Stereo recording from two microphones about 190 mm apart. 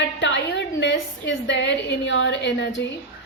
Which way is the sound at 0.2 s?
70° left (ahead or behind).